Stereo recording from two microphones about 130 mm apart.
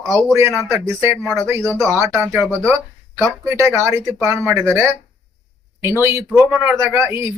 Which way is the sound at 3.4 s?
20° right (ahead or behind).